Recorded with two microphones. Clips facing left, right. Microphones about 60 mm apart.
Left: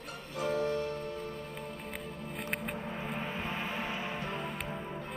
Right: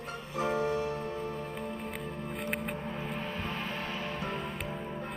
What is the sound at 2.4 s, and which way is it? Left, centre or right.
Music, centre.